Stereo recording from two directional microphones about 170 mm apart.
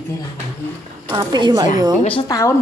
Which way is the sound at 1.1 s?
25° right (ahead or behind).